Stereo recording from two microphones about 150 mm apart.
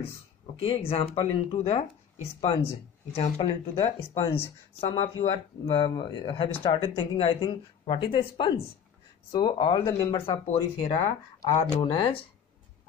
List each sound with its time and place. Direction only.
0.6 s speech: 40° left (ahead or behind)
3.2 s speech: 45° left (ahead or behind)
10.4 s speech: 50° left (ahead or behind)
11.4 s speech: 20° left (ahead or behind)
11.8 s speech: 35° left (ahead or behind)